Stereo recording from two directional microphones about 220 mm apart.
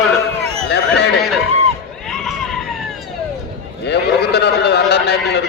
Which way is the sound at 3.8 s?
50° left (ahead or behind).